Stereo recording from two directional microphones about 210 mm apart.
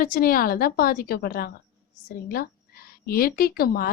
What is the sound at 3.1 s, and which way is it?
Speech, 45° left (ahead or behind).